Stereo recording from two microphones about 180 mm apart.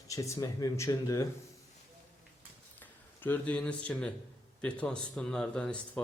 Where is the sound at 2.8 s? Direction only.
10° left (ahead or behind).